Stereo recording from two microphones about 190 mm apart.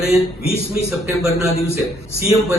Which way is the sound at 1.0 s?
Centre (ahead or behind).